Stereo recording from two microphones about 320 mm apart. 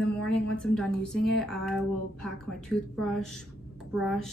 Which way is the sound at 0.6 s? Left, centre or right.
Centre.